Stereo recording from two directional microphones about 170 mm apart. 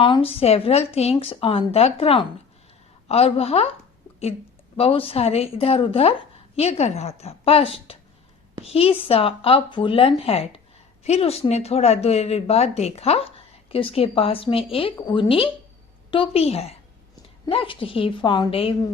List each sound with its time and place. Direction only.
0.0 s speech: 30° left (ahead or behind)
4.8 s speech: 35° left (ahead or behind)